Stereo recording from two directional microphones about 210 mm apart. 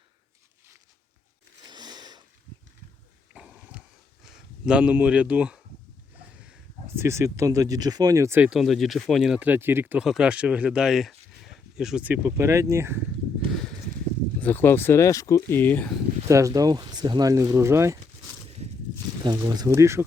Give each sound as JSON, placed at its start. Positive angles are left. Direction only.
{"t": 1.6, "sound": "sniff", "side_deg": -20}
{"t": 3.3, "sound": "a sound", "side_deg": -5}
{"t": 4.3, "sound": "speech", "side_deg": -5}
{"t": 14.4, "sound": "speech", "side_deg": 10}
{"t": 16.3, "sound": "speech", "side_deg": -15}
{"t": 19.2, "sound": "speech", "side_deg": -15}